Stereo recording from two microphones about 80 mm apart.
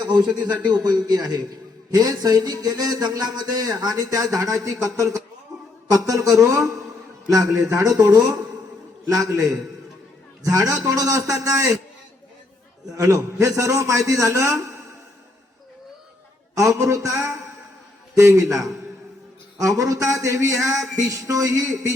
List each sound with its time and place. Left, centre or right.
0.0 s a man's voice: right
5.5 s a sound: right
5.9 s speech: right
12.9 s speech: right
16.6 s speech: right
19.8 s speech: right